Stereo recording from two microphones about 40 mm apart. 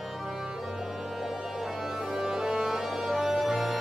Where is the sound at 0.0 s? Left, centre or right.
Centre.